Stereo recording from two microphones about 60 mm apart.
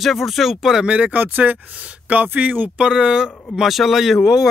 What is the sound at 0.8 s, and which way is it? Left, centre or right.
Speech, right.